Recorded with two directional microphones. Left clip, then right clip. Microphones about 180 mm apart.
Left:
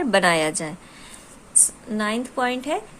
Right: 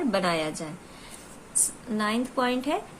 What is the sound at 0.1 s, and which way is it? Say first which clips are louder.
Speech: left 11 dB; 40° left (ahead or behind).